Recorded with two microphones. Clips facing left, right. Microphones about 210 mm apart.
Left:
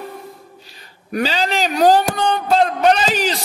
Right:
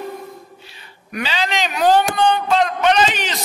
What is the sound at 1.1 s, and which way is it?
A man's voice, 40° left (ahead or behind).